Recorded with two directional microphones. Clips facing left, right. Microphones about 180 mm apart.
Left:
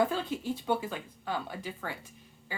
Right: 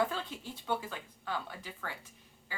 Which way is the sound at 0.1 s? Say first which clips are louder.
Left 7 dB; 10° left (ahead or behind).